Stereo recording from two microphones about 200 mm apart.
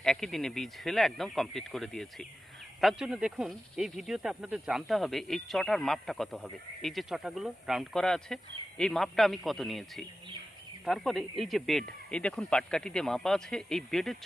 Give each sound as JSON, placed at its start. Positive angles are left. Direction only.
{"t": 0.0, "sound": "speech", "side_deg": 0}